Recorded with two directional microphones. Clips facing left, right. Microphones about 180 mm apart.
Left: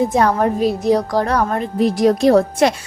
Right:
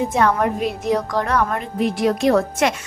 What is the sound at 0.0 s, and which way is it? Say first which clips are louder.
Speech: left 3 dB; 35° left (ahead or behind).